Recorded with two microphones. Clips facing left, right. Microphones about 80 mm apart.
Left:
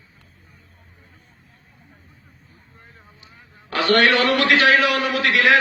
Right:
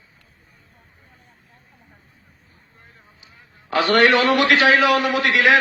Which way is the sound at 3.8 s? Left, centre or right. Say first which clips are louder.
Right 1 dB; right.